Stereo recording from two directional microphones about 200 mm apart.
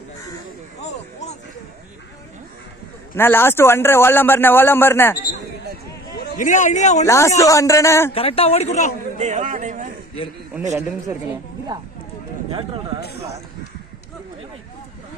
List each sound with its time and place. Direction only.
3.2 s a man's voice: 10° left (ahead or behind)
6.1 s a man's voice: 40° left (ahead or behind)
7.1 s a man's voice: 15° left (ahead or behind)
8.1 s speech: 30° left (ahead or behind)
9.1 s a man's voice: 35° right (ahead or behind)
12.5 s speech: 25° right (ahead or behind)